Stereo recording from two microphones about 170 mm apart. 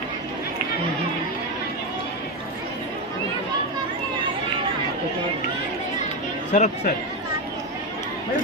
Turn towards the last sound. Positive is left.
turn(degrees=45)  # may be behind; listen again after turning